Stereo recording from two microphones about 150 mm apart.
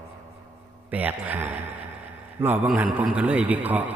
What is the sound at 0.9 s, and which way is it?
A man's voice, 10° right (ahead or behind).